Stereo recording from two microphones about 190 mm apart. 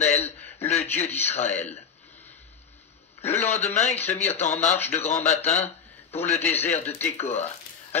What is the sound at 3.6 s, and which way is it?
Speech, 35° left (ahead or behind).